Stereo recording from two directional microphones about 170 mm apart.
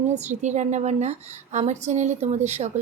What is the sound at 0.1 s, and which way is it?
A woman's voice, 40° right (ahead or behind).